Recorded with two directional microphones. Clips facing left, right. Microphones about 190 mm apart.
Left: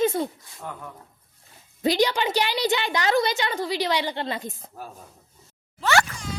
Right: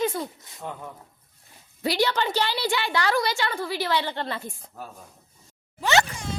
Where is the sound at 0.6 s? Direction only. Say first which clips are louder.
Right 1 dB; 20° right (ahead or behind).